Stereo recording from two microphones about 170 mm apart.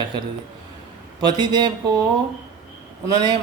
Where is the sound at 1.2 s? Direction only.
25° right (ahead or behind).